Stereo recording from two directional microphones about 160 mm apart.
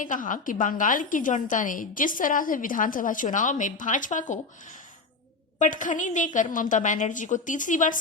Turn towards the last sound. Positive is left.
turn(degrees=55)  # may be behind; listen again after turning